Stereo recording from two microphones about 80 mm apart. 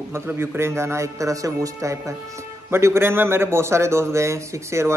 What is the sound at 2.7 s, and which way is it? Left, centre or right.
Speech, right.